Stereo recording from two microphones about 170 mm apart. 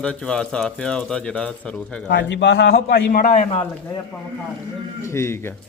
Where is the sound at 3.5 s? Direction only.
30° left (ahead or behind).